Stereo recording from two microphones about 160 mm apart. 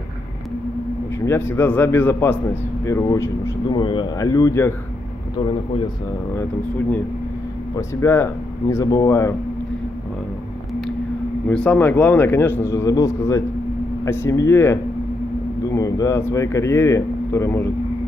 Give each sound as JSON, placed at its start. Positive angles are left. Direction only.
{"t": 1.2, "sound": "speech", "side_deg": 15}
{"t": 7.7, "sound": "speech", "side_deg": 15}
{"t": 11.4, "sound": "speech", "side_deg": 5}